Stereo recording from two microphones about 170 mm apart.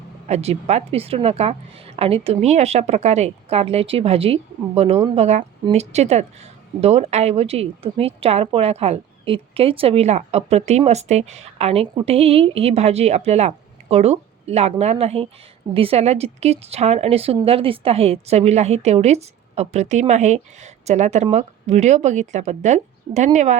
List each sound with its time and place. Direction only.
0.3 s a woman's voice: 40° right (ahead or behind)